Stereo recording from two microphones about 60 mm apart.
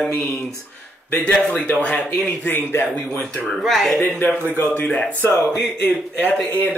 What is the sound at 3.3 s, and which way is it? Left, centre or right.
Speech, centre.